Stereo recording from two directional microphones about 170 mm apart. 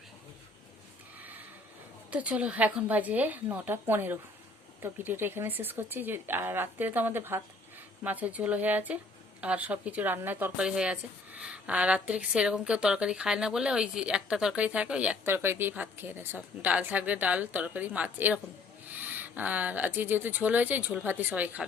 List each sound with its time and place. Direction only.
2.0 s speech: 10° right (ahead or behind)